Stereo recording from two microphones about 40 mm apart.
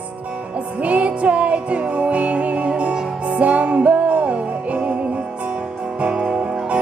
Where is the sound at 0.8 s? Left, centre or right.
Right.